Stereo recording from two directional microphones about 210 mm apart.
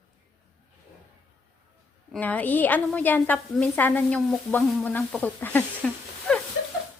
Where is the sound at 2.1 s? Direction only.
5° left (ahead or behind).